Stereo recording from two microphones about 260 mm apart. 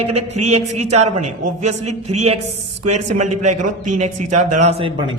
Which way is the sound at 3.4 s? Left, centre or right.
Right.